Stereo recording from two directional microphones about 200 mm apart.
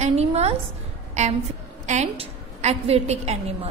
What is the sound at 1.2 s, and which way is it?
A woman's voice, 35° right (ahead or behind).